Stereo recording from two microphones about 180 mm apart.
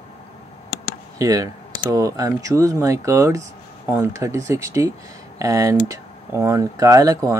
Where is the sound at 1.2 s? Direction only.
20° right (ahead or behind).